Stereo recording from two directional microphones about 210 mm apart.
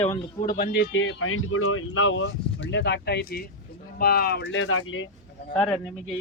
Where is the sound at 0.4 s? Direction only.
45° left (ahead or behind); by 5.0 s 75° left (ahead or behind).